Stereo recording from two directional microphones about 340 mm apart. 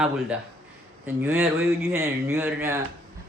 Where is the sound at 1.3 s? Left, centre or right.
Centre.